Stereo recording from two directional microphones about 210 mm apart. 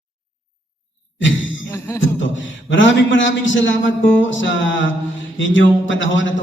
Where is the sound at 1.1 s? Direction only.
65° left (ahead or behind).